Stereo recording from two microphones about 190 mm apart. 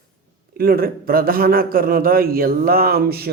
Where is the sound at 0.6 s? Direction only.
50° right (ahead or behind).